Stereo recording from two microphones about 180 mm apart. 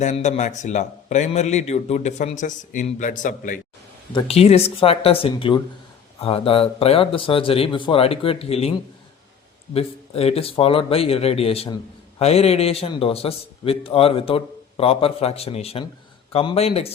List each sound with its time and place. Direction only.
0.0 s a man's voice: 40° left (ahead or behind)
4.1 s a man's voice: 35° left (ahead or behind)
9.7 s a man's voice: 35° left (ahead or behind)